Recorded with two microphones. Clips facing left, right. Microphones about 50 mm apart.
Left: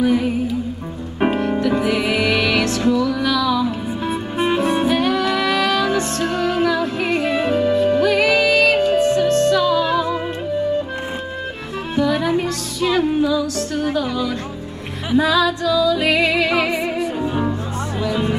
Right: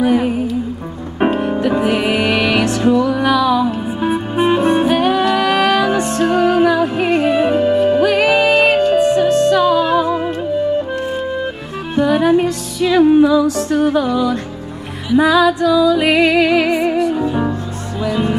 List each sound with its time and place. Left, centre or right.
0.0 s music: right
1.8 s music: right
7.2 s music: centre
12.0 s music: right
15.1 s music: centre